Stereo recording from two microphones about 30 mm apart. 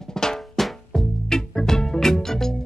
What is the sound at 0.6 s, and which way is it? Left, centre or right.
Music, centre.